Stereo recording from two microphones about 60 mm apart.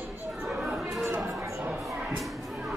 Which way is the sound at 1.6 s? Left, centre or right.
Right.